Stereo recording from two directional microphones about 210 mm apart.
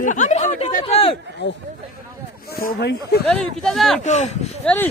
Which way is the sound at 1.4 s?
60° left (ahead or behind).